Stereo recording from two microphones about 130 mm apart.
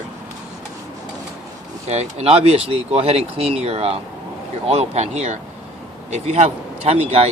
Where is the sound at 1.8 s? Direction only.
55° right (ahead or behind).